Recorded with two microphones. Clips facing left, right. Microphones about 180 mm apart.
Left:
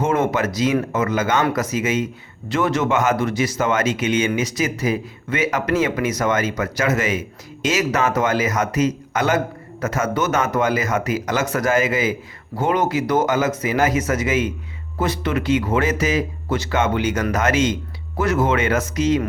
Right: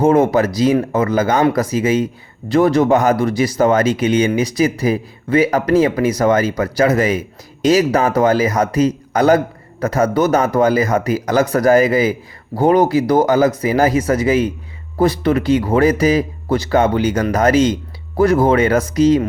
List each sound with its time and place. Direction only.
0.0 s speech: 35° right (ahead or behind)